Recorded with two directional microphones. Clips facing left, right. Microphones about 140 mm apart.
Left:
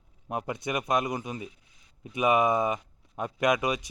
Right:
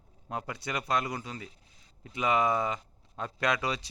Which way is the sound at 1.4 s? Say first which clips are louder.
Left 5 dB; 35° right (ahead or behind).